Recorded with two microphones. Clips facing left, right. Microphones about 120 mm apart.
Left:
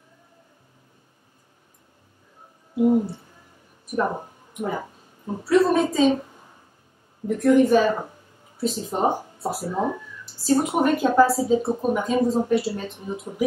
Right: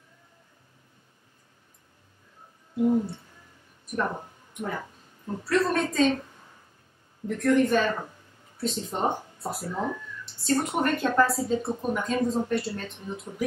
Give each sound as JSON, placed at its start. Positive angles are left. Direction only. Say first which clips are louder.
{"t": 2.7, "sound": "a sound", "louder": "left 4 dB", "side_deg": 15}
{"t": 3.8, "sound": "speech", "louder": "left 5 dB", "side_deg": 10}
{"t": 4.6, "sound": "a sound", "louder": "left 5 dB", "side_deg": 15}
{"t": 5.4, "sound": "a woman's voice", "louder": "left 6 dB", "side_deg": 5}
{"t": 7.2, "sound": "a woman's voice", "louder": "left 5 dB", "side_deg": 5}
{"t": 9.7, "sound": "speech", "louder": "left 5 dB", "side_deg": 20}
{"t": 10.2, "sound": "a woman's voice", "louder": "left 5 dB", "side_deg": 5}